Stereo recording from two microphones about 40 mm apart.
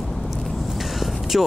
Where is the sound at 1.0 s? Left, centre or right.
Centre.